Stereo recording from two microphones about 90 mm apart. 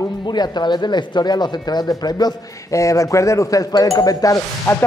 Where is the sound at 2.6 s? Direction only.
35° left (ahead or behind).